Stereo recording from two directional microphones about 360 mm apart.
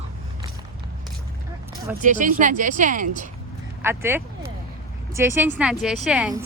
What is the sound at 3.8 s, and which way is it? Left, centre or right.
A woman's voice, centre.